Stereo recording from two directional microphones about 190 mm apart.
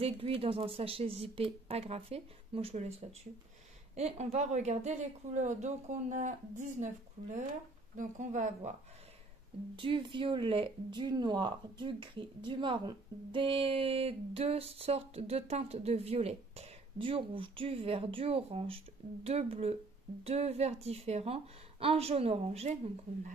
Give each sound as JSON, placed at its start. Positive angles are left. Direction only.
{"t": 0.0, "sound": "speech", "side_deg": -30}
{"t": 9.8, "sound": "speech", "side_deg": -25}